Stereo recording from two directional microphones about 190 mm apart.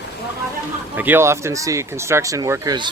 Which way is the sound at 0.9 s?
10° right (ahead or behind).